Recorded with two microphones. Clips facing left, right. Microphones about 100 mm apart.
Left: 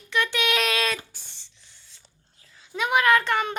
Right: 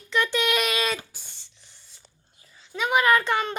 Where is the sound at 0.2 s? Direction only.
5° right (ahead or behind).